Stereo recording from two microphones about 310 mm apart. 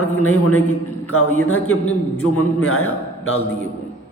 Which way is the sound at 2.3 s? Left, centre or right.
Left.